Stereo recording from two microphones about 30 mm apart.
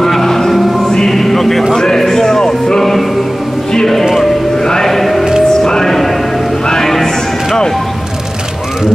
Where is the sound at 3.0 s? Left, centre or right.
Centre.